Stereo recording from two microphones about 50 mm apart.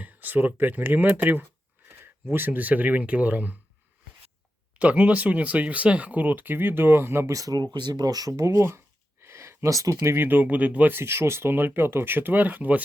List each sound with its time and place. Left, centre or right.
0.0 s speech: right
4.8 s speech: right
8.3 s speech: right
9.2 s a sound: right
10.2 s speech: right
10.9 s speech: right